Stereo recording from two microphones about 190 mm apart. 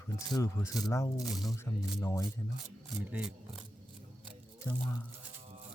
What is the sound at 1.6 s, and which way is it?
Speech, 15° left (ahead or behind).